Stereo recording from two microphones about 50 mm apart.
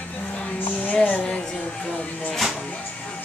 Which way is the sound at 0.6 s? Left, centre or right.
Left.